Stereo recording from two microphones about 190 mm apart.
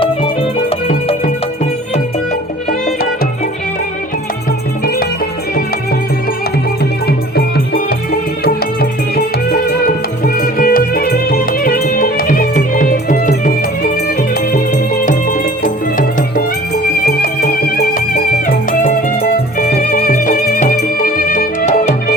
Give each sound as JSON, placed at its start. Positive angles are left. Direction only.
{"t": 0.9, "sound": "music", "side_deg": 40}
{"t": 7.3, "sound": "music", "side_deg": 55}